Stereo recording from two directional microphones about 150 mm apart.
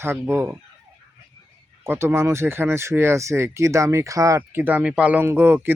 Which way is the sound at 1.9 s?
15° right (ahead or behind).